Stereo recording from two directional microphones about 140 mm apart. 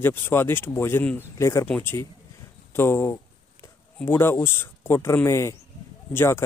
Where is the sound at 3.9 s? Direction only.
15° left (ahead or behind).